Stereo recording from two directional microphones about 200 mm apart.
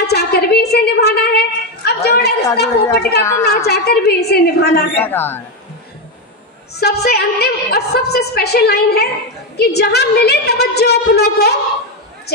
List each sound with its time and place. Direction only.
0.0 s a sound: 55° left (ahead or behind)
1.9 s a woman's voice: 55° left (ahead or behind)
3.2 s speech: 15° left (ahead or behind)
3.6 s a woman's voice: 55° left (ahead or behind)
4.9 s speech: 10° left (ahead or behind)
6.7 s a woman's voice: 55° left (ahead or behind)